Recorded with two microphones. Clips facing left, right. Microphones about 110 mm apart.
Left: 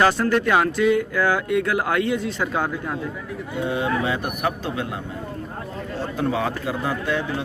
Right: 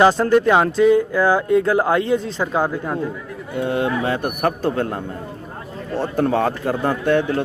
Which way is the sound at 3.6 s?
55° right (ahead or behind).